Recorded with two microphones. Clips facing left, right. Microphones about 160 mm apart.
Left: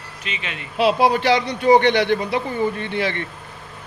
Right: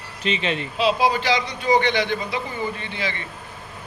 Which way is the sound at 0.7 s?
60° left (ahead or behind).